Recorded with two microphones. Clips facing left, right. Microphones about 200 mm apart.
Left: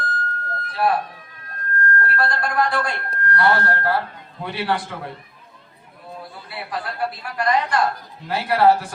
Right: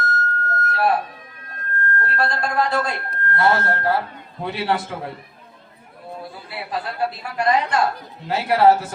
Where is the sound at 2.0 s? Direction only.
25° right (ahead or behind).